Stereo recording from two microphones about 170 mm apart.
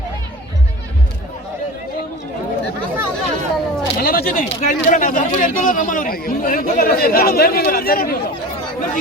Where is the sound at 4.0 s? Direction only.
60° left (ahead or behind).